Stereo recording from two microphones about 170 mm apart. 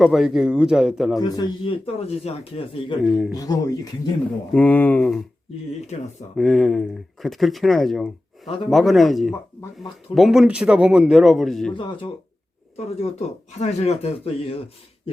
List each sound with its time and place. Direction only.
0.0 s speech: centre (ahead or behind)
1.2 s a man's voice: 25° left (ahead or behind)
2.0 s speech: 35° left (ahead or behind)
3.0 s speech: centre (ahead or behind)
3.3 s a man's voice: 20° left (ahead or behind)
4.5 s speech: 10° left (ahead or behind)
6.3 s speech: 5° left (ahead or behind)
11.7 s a man's voice: 30° left (ahead or behind)
12.7 s speech: 40° left (ahead or behind)